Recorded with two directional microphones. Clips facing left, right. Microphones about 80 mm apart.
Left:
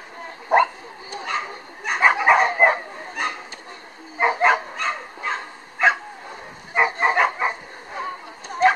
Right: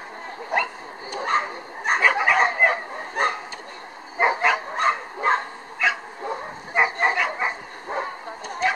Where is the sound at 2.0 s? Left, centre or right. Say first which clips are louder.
Left 4 dB; left.